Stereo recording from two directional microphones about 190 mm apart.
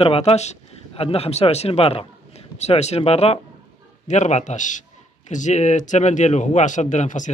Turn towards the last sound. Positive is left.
turn(degrees=40)  # may be behind; listen again after turning